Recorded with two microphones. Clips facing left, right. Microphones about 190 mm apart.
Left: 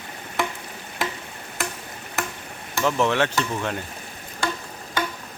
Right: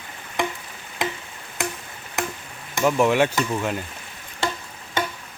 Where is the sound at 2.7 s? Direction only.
10° right (ahead or behind).